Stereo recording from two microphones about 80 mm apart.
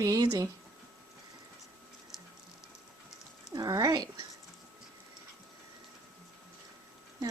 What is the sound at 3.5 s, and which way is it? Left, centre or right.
Speech, right.